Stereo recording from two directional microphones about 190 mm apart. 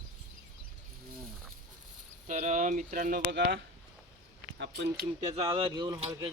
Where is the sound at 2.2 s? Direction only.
40° right (ahead or behind).